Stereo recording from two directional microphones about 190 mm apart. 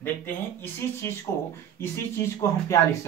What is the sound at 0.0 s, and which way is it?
Speech, 10° left (ahead or behind).